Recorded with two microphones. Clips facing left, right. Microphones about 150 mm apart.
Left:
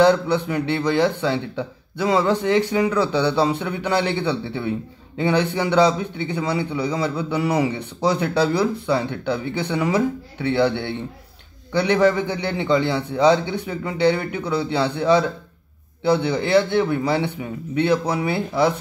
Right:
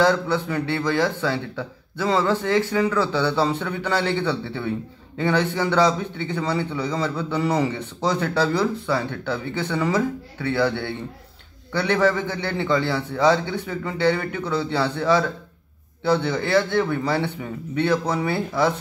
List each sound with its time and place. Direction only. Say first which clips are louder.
0.0 s a man's voice: left 3 dB; 20° left (ahead or behind)